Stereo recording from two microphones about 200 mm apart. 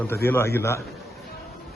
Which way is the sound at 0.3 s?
10° left (ahead or behind).